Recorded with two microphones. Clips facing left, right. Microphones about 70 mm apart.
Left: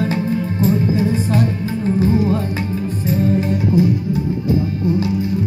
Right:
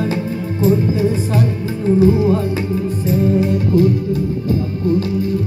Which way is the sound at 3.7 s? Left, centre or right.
Centre.